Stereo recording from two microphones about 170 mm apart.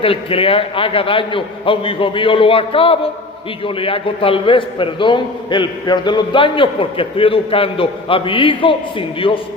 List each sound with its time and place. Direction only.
0.0 s a man's voice: 35° left (ahead or behind)